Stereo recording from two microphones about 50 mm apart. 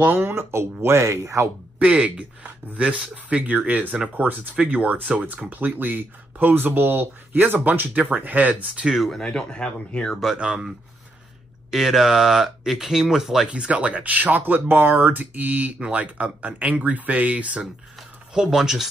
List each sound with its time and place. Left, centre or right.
0.0 s speech: right
1.8 s speech: right
9.1 s speech: centre
10.3 s speech: centre
11.7 s speech: centre
13.5 s speech: right
18.3 s speech: centre